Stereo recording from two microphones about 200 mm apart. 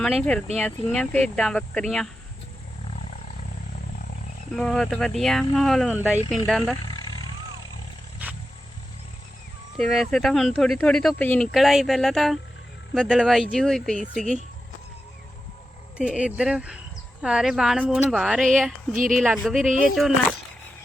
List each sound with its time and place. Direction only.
0.2 s speech: 5° left (ahead or behind)
4.5 s speech: 5° left (ahead or behind)
6.8 s wild animals: 20° left (ahead or behind)
9.7 s speech: centre (ahead or behind)
16.0 s speech: 5° right (ahead or behind)
18.9 s speech: 40° right (ahead or behind)
19.2 s speech: 5° right (ahead or behind)